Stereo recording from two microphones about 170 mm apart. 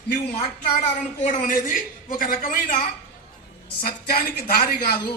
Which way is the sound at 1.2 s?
50° left (ahead or behind).